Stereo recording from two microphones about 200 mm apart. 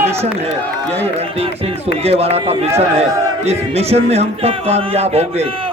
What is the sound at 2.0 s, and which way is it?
Speech, 30° right (ahead or behind).